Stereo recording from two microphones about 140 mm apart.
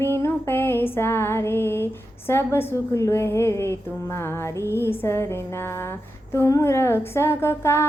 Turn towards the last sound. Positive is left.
turn(degrees=20)  # may be behind; listen again after turning